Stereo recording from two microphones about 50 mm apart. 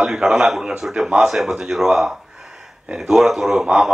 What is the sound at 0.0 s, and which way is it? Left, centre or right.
A man's voice, centre.